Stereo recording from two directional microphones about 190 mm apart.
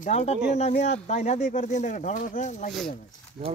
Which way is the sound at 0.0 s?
40° left (ahead or behind).